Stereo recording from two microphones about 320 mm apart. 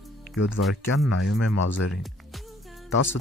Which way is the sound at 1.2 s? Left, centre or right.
Left.